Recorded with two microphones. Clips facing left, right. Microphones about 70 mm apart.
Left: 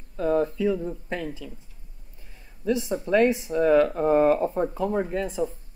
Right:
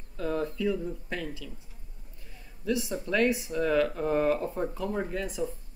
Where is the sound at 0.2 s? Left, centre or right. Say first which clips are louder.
Left 7 dB; left.